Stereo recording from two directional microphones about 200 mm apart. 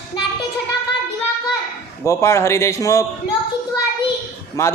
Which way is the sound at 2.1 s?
15° left (ahead or behind).